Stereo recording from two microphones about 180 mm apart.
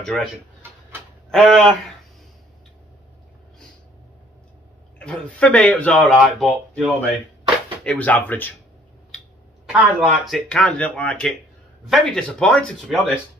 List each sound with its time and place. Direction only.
0.0 s speech: centre (ahead or behind)
1.3 s speech: centre (ahead or behind)
4.9 s speech: 5° left (ahead or behind)
9.7 s speech: 5° right (ahead or behind)